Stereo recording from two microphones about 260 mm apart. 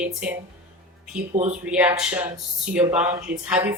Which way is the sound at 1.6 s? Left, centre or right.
Centre.